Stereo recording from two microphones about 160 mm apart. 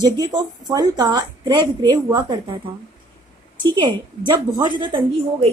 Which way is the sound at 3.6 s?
30° right (ahead or behind).